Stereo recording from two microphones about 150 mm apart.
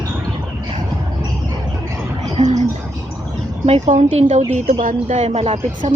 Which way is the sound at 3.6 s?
45° right (ahead or behind).